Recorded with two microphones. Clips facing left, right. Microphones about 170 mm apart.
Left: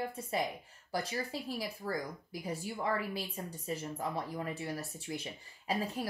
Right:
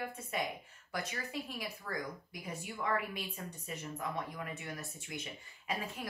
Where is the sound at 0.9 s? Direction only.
30° left (ahead or behind).